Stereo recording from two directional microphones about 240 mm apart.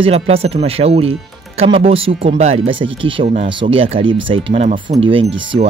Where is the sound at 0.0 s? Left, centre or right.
Right.